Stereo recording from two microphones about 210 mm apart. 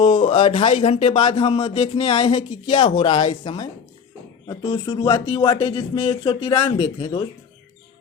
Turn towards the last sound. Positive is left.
turn(degrees=30)  # may be behind; listen again after turning